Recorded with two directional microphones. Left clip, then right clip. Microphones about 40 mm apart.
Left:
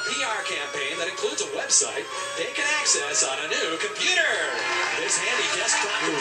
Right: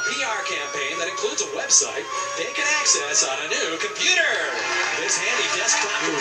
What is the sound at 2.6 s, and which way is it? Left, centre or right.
Speech, centre.